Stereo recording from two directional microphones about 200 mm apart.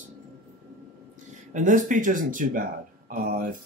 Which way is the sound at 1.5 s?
40° right (ahead or behind).